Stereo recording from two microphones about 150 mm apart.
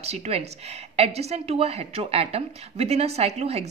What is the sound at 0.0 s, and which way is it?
Speech, 45° right (ahead or behind).